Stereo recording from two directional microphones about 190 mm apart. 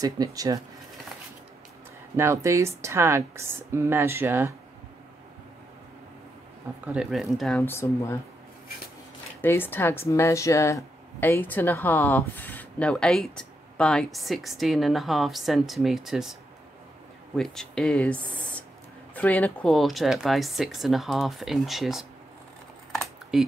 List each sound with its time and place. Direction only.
0.0 s speech: 20° right (ahead or behind)
2.1 s speech: 15° right (ahead or behind)
6.9 s speech: centre (ahead or behind)
9.4 s speech: 10° left (ahead or behind)
17.4 s speech: centre (ahead or behind)
23.3 s speech: 5° right (ahead or behind)